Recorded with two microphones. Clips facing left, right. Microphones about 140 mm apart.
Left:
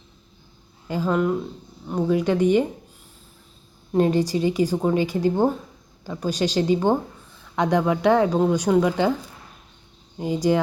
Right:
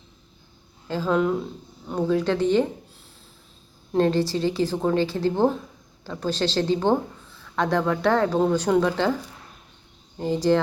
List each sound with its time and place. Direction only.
0.9 s speech: 10° left (ahead or behind)
3.9 s speech: 15° left (ahead or behind)
10.2 s speech: 10° left (ahead or behind)